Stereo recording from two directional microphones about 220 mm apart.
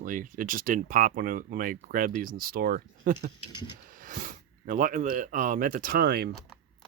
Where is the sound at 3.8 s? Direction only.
40° right (ahead or behind).